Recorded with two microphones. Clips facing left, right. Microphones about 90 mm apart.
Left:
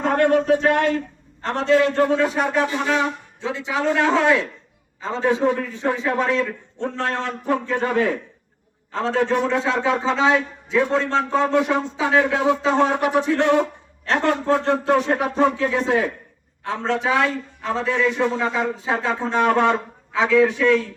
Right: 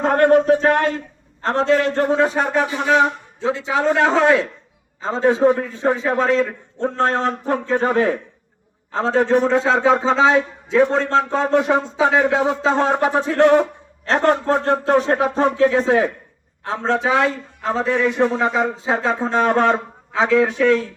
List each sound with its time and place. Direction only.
0.0 s a man's voice: 40° right (ahead or behind)
12.1 s a man's voice: 25° right (ahead or behind)
12.5 s a man's voice: 35° right (ahead or behind)